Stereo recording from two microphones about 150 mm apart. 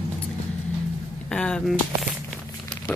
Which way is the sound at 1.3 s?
5° left (ahead or behind).